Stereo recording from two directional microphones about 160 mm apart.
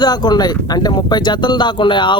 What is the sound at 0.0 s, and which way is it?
Speech, 25° left (ahead or behind).